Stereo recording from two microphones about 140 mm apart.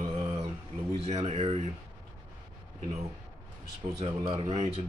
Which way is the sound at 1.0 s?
50° right (ahead or behind).